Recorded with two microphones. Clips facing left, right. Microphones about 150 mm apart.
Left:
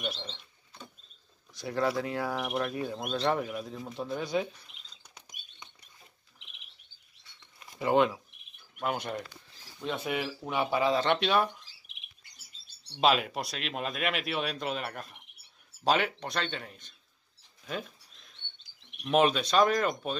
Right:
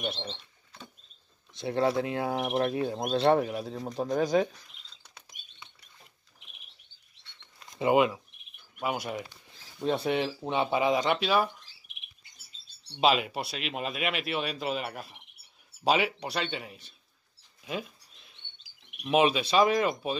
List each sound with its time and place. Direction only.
0.0 s speech: 25° right (ahead or behind)
1.5 s speech: 25° right (ahead or behind); by 4.5 s 40° right (ahead or behind)
4.6 s chirp: 15° left (ahead or behind)
7.9 s speech: 5° right (ahead or behind)
9.8 s speech: 30° right (ahead or behind)
11.1 s speech: 5° right (ahead or behind)
13.0 s speech: centre (ahead or behind)
17.6 s chirp: 5° right (ahead or behind)